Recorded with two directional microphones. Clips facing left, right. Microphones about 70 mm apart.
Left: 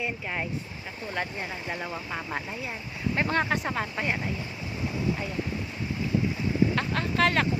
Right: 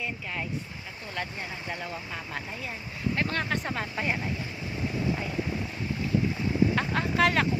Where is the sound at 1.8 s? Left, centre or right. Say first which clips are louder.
Left 3 dB; left.